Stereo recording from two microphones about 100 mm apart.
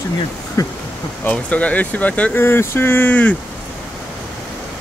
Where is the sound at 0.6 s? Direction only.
35° left (ahead or behind).